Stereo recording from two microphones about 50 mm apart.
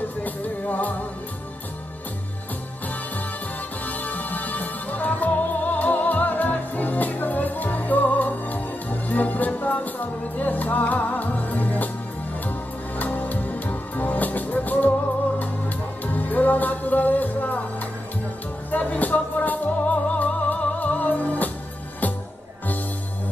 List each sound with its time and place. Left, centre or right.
0.2 s music: left
3.8 s music: left